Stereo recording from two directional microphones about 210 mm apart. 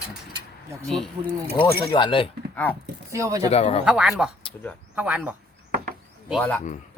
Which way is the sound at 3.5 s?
30° left (ahead or behind).